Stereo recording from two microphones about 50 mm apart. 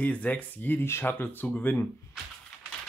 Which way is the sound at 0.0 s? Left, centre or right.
Left.